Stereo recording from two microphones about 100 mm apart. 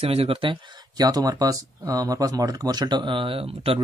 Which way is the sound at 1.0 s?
40° right (ahead or behind).